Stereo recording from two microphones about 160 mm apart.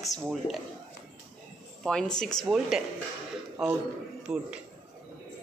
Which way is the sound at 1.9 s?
5° left (ahead or behind).